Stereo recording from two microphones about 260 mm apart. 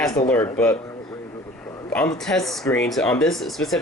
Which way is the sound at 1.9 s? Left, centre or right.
Centre.